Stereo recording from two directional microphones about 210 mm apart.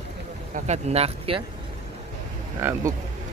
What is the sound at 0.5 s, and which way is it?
Speech, 35° right (ahead or behind).